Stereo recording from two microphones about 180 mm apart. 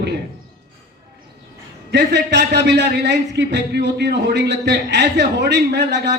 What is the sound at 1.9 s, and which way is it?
A man's voice, 70° right (ahead or behind).